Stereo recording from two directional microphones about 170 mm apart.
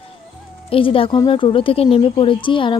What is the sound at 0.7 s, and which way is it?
Speech, 30° left (ahead or behind).